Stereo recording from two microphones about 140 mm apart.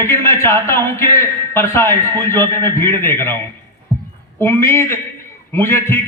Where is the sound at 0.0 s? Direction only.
20° left (ahead or behind).